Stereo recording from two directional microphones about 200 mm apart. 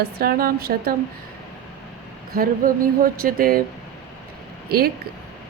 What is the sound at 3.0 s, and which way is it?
Speech, 45° right (ahead or behind).